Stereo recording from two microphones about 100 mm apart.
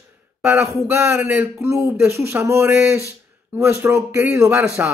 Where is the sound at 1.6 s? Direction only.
30° right (ahead or behind).